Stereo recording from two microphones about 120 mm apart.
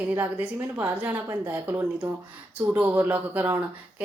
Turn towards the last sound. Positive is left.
turn(degrees=-15)  # may be behind; listen again after turning